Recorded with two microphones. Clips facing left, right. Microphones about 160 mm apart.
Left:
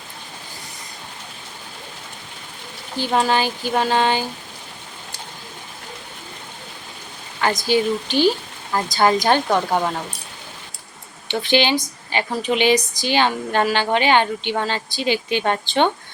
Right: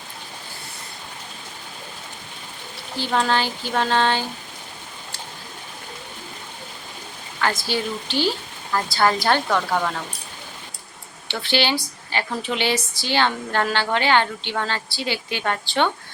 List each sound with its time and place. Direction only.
3.0 s speech: 15° left (ahead or behind)
7.4 s speech: 15° left (ahead or behind)
11.3 s speech: 15° left (ahead or behind)